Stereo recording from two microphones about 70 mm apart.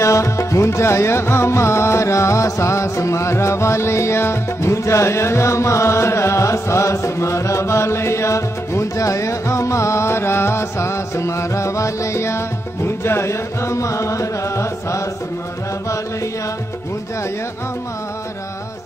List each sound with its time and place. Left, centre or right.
0.0 s music: left